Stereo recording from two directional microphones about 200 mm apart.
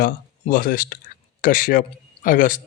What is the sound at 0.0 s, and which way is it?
Speech, 45° left (ahead or behind).